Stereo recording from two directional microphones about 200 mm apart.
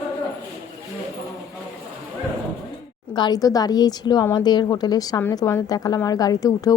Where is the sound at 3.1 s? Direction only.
20° left (ahead or behind).